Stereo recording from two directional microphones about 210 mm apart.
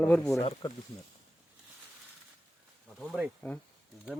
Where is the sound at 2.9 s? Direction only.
5° right (ahead or behind).